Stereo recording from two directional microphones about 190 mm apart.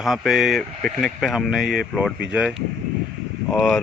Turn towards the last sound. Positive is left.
turn(degrees=5)  # may be behind; listen again after turning